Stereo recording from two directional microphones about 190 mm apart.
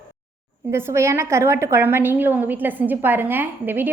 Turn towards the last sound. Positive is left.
turn(degrees=-10)  # may be behind; listen again after turning